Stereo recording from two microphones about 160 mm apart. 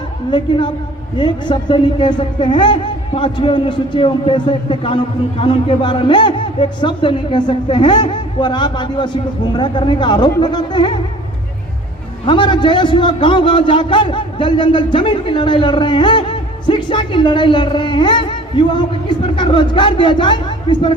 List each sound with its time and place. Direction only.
0.3 s a man's voice: 30° left (ahead or behind)
12.2 s a man's voice: 30° left (ahead or behind)